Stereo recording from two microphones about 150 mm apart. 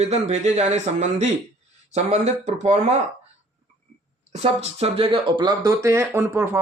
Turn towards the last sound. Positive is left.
turn(degrees=-15)  # may be behind; listen again after turning